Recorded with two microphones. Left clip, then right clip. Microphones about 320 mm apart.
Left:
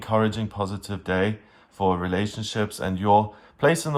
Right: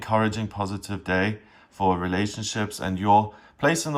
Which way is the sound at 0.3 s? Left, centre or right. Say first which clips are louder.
Even; right.